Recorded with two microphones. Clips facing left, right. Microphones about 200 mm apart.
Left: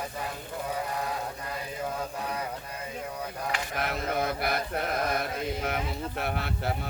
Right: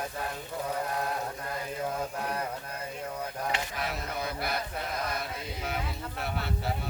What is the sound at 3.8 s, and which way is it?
Mantra, 55° left (ahead or behind).